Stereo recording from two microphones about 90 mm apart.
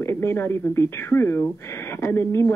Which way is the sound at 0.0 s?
30° left (ahead or behind).